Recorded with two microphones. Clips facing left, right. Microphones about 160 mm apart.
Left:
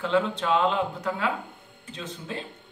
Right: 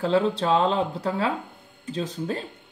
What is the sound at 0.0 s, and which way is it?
Speech, 35° right (ahead or behind).